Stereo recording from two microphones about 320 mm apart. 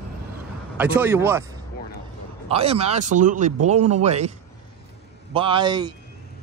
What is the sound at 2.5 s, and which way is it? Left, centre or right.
Speech, centre.